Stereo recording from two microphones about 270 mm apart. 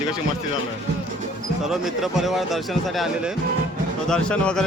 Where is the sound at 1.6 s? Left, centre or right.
Centre.